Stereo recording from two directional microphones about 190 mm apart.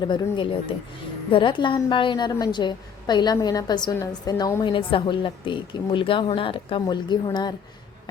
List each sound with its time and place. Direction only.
0.0 s a woman's voice: 25° left (ahead or behind)